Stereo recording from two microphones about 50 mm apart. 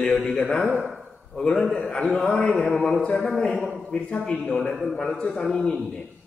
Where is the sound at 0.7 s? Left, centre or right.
Centre.